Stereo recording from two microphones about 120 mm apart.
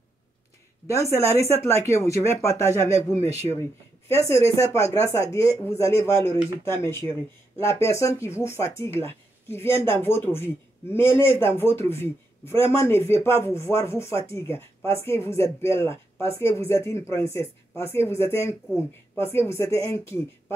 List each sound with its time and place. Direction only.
0.8 s speech: 25° left (ahead or behind)
4.3 s speech: 25° left (ahead or behind)